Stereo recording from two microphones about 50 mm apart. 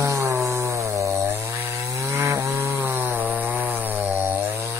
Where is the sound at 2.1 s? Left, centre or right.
Right.